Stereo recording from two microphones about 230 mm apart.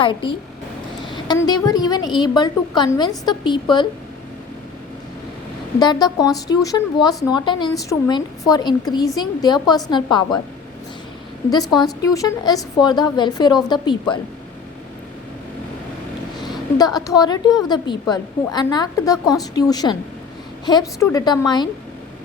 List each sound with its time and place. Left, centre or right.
0.0 s a woman's voice: left
5.8 s a woman's voice: centre
11.4 s a woman's voice: centre
16.7 s speech: centre